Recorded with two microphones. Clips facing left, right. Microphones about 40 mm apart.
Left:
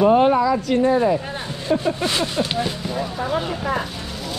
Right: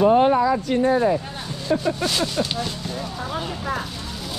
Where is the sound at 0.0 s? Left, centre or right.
Left.